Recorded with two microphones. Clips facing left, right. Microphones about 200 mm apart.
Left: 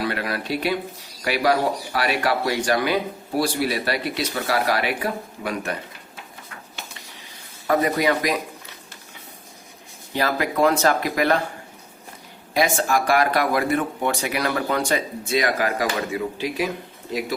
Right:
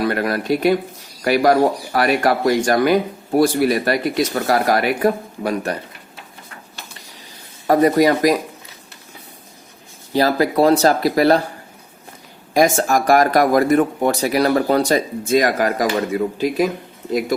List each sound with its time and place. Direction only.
0.0 s speech: 45° right (ahead or behind)
7.7 s speech: 40° right (ahead or behind)
10.1 s speech: 35° right (ahead or behind)
12.5 s speech: 45° right (ahead or behind)